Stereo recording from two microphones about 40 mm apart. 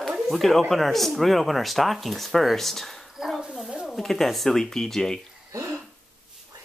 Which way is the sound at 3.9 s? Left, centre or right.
Centre.